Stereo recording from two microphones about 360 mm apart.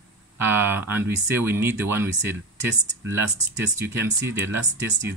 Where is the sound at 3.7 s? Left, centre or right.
Centre.